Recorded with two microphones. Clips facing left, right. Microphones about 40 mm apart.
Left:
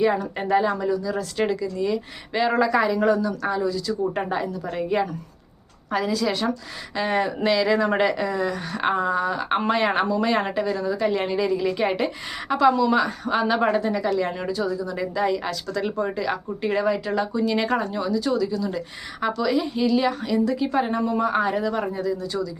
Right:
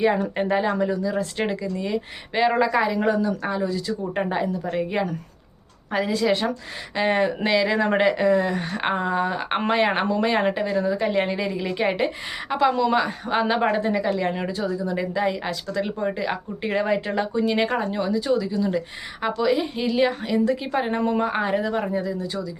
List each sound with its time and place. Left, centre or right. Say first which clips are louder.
0.5 s speech: left 3 dB; centre
4.2 s a woman's voice: right 2 dB; centre
5.9 s speech: right 2 dB; right
8.7 s speech: left 4 dB; right
12.7 s speech: left 1 dB; right
21.0 s speech: right 1 dB; right
21.2 s speech: left 1 dB; right